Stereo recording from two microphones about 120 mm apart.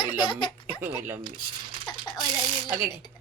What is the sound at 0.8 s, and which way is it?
Speech, 15° right (ahead or behind).